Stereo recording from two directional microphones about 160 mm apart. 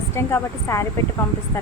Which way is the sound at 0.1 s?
15° left (ahead or behind).